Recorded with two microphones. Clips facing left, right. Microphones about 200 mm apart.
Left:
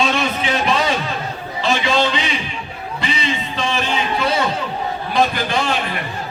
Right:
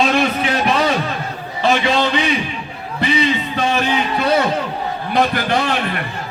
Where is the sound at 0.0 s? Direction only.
55° right (ahead or behind).